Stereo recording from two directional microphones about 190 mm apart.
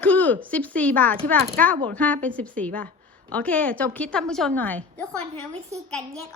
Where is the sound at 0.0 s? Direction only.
10° left (ahead or behind).